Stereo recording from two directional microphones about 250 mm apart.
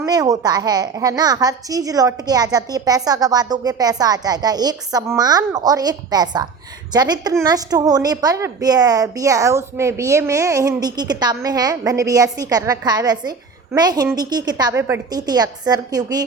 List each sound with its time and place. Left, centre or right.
0.0 s a child's voice: centre